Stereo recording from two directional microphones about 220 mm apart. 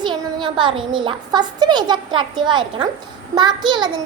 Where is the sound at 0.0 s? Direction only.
20° right (ahead or behind).